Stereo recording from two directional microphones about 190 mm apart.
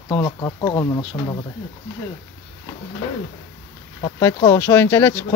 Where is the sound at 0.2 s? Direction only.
20° left (ahead or behind).